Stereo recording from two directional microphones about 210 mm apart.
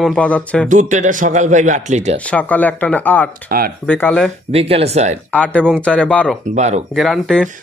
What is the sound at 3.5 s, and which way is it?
Speech, 45° right (ahead or behind).